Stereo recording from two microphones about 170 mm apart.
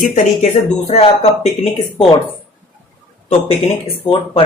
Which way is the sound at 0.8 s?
35° left (ahead or behind).